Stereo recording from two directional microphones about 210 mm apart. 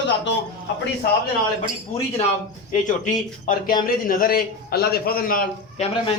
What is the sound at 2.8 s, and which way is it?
A man's voice, 35° left (ahead or behind).